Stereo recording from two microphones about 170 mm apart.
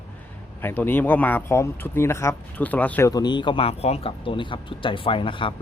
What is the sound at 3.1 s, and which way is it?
Speech, 25° left (ahead or behind).